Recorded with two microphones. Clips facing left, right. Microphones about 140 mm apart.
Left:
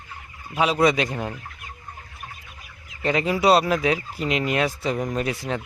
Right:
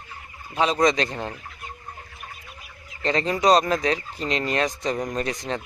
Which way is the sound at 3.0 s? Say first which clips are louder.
Left 1 dB; 10° left (ahead or behind).